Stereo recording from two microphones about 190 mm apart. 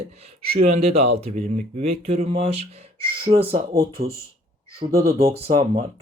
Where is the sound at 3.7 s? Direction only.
55° right (ahead or behind).